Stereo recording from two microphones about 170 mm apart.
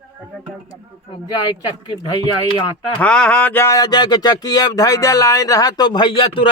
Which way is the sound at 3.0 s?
5° left (ahead or behind).